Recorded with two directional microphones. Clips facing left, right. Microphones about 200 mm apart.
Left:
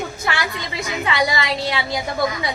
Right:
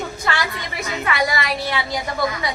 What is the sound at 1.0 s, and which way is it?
Speech, 20° left (ahead or behind).